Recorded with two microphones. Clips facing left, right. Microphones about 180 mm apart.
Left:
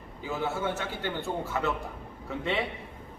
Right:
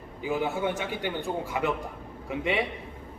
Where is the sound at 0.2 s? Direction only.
15° right (ahead or behind).